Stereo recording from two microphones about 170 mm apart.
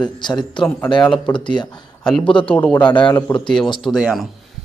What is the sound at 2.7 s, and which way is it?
Speech, 25° left (ahead or behind).